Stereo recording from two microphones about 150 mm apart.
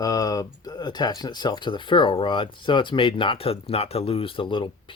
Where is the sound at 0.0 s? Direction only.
25° left (ahead or behind).